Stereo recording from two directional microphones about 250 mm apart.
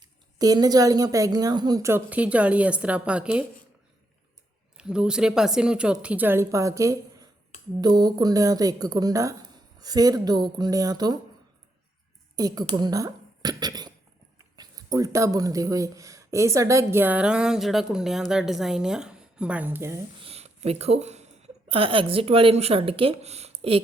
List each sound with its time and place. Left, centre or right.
0.0 s speech: centre
4.8 s a woman's voice: centre
12.4 s speech: centre
20.2 s a woman's voice: right